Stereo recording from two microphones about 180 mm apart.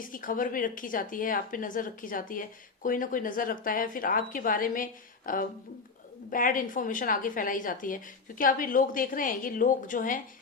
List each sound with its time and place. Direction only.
0.0 s speech: 50° left (ahead or behind)